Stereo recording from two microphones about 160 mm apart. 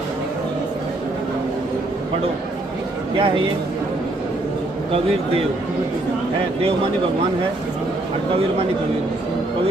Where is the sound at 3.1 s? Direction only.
35° right (ahead or behind).